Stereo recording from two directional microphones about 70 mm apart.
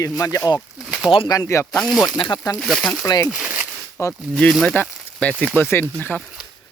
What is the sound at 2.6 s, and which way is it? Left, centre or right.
Speech, centre.